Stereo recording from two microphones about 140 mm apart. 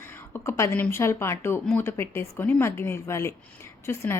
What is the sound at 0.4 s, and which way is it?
A woman's voice, 20° left (ahead or behind).